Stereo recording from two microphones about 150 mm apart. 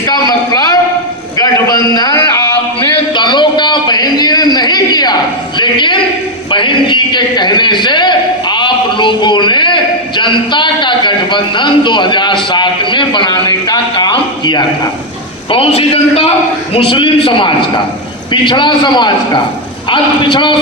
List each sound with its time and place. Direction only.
0.1 s a man's voice: 25° left (ahead or behind)
2.8 s a sound: 30° left (ahead or behind)
6.5 s a man's voice: 35° left (ahead or behind)